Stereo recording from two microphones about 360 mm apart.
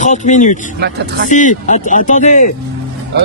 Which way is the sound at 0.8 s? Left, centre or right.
Right.